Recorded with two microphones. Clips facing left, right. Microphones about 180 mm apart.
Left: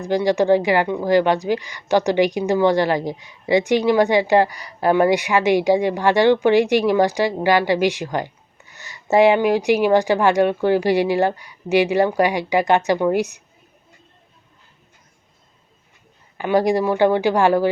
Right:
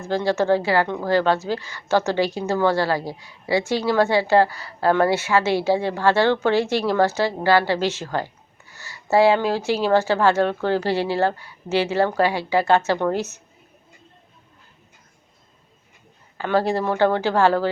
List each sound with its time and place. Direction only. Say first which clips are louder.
0.0 s speech: left 3 dB; 15° left (ahead or behind)
16.4 s speech: left 3 dB; 15° left (ahead or behind)